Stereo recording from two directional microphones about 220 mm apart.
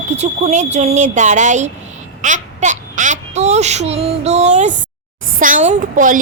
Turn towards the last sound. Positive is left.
turn(degrees=-35)  # may be behind; listen again after turning